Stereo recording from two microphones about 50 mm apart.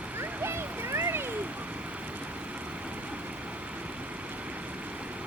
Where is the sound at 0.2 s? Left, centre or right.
Right.